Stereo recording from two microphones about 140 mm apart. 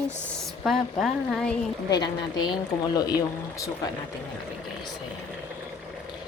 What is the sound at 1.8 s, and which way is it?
Speech, 30° left (ahead or behind).